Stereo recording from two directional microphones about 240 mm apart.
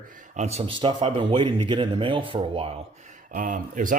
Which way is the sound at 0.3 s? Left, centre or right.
Right.